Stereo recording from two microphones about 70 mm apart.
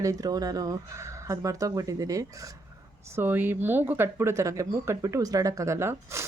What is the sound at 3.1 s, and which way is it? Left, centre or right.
A woman's voice, right.